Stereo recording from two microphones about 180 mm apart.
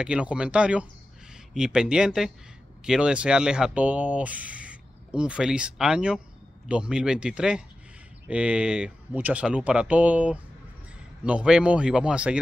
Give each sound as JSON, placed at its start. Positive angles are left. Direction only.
{"t": 0.0, "sound": "speech", "side_deg": -5}